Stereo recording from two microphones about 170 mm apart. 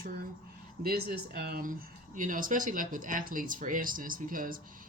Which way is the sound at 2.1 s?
50° right (ahead or behind).